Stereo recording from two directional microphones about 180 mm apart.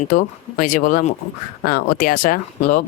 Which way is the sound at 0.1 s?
50° left (ahead or behind).